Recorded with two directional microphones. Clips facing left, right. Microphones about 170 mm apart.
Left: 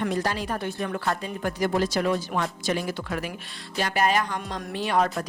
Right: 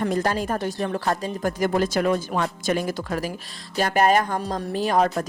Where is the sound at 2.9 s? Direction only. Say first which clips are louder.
Right 3 dB; 40° right (ahead or behind).